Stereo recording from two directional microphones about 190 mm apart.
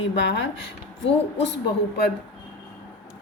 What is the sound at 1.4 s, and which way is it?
Speech, 65° left (ahead or behind).